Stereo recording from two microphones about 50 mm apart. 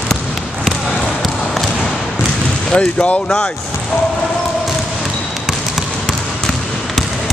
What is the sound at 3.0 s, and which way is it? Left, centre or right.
Speech, left.